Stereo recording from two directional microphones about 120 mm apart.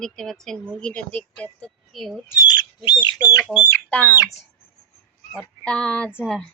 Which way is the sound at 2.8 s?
40° left (ahead or behind).